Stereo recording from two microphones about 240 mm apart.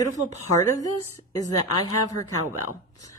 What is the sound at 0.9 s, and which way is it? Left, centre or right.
A woman's voice, left.